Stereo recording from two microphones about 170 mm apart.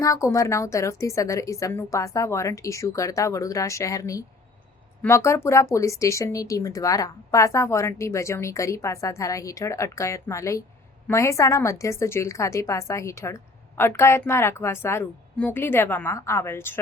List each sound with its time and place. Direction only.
0.0 s speech: 15° left (ahead or behind)